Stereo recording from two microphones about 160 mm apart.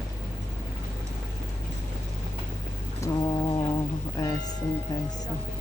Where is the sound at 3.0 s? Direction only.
25° left (ahead or behind).